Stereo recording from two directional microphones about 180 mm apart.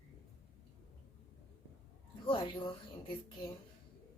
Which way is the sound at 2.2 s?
25° left (ahead or behind).